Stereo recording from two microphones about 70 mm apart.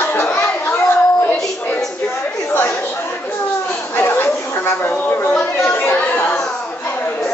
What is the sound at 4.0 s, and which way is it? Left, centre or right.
Chatter, left.